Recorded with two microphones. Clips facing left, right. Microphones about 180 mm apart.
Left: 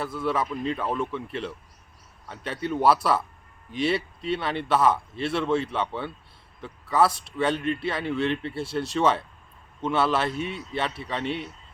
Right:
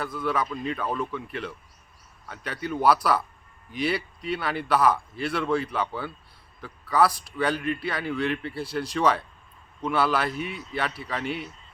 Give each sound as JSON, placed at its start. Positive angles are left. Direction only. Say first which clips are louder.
{"t": 0.0, "sound": "speech", "louder": "left 1 dB", "side_deg": 0}
{"t": 0.3, "sound": "a man's voice", "louder": "left 1 dB", "side_deg": 30}
{"t": 5.7, "sound": "speech", "louder": "left 1 dB", "side_deg": 0}
{"t": 6.6, "sound": "a man's voice", "louder": "even", "side_deg": 25}